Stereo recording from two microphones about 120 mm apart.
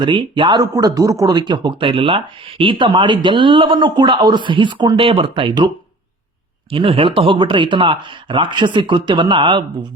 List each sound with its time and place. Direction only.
0.0 s speech: 40° right (ahead or behind)